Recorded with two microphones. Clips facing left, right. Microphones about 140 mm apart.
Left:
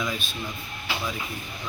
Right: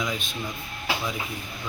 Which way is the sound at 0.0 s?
20° right (ahead or behind).